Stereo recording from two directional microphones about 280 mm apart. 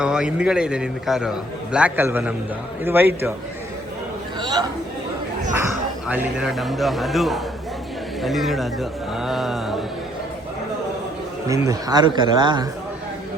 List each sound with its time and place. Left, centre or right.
0.0 s a man's voice: centre
4.4 s a sound: centre
6.1 s a man's voice: centre
11.4 s speech: centre